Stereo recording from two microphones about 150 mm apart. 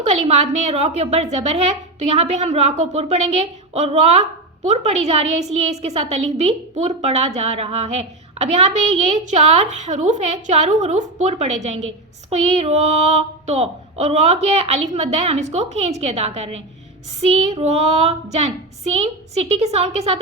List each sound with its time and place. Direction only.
0.3 s a woman's voice: 45° right (ahead or behind)